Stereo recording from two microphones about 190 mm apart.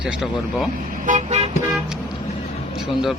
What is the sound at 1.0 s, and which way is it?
Car, 40° right (ahead or behind).